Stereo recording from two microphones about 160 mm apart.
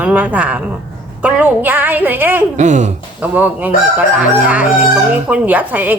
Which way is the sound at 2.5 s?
50° right (ahead or behind).